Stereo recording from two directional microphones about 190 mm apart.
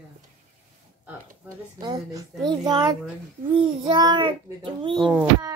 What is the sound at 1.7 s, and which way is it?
Child singing, 20° right (ahead or behind).